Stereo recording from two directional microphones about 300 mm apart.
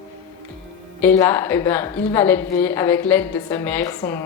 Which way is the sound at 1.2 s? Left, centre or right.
Centre.